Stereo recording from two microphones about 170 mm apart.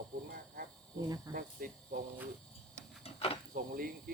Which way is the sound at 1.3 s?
55° right (ahead or behind).